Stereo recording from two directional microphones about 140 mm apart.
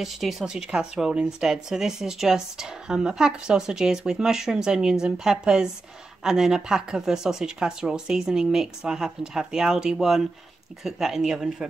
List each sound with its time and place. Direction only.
0.0 s speech: centre (ahead or behind)